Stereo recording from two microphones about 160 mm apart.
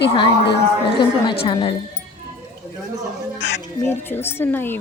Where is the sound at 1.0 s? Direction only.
30° left (ahead or behind).